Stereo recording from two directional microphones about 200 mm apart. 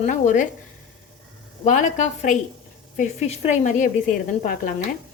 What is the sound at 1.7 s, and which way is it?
A woman's voice, 40° left (ahead or behind).